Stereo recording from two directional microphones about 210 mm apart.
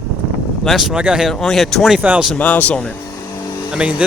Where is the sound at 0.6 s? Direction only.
Centre (ahead or behind).